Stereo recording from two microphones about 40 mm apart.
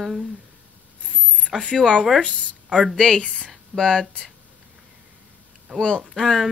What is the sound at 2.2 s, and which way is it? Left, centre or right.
Speech, left.